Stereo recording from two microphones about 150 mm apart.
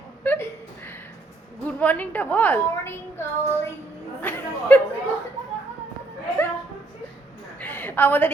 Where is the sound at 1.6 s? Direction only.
10° left (ahead or behind).